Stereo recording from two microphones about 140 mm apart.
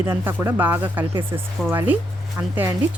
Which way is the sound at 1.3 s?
25° right (ahead or behind).